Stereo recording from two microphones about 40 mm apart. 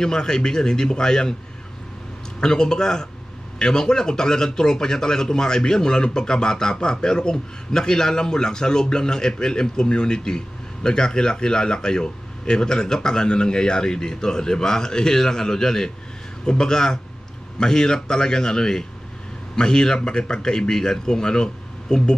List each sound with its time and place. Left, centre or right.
0.0 s a man's voice: centre
2.4 s a man's voice: centre